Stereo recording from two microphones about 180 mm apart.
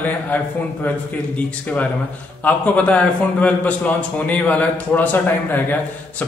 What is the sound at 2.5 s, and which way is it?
A man's voice, 5° left (ahead or behind).